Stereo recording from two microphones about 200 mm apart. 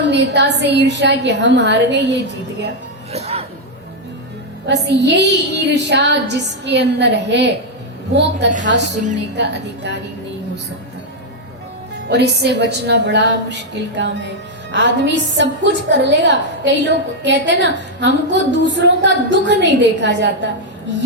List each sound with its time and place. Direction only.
0.1 s a woman's voice: 60° right (ahead or behind)
3.1 s speech: 30° right (ahead or behind)
4.6 s a woman's voice: 60° right (ahead or behind)
12.0 s a woman's voice: 55° right (ahead or behind)